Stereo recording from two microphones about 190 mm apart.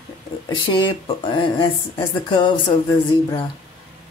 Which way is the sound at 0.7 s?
25° left (ahead or behind).